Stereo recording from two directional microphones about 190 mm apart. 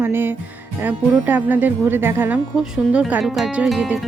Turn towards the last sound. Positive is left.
turn(degrees=-5)  # may be behind; listen again after turning